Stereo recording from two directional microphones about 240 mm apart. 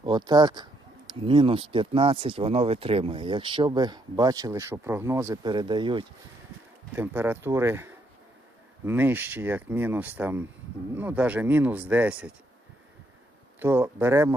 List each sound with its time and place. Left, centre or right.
0.0 s speech: centre
6.9 s speech: centre
13.6 s speech: centre